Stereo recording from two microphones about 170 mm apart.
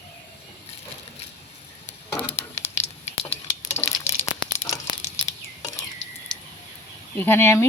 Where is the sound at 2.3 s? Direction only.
40° left (ahead or behind).